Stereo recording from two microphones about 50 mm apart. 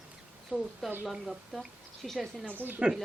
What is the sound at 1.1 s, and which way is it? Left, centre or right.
A woman's voice, centre.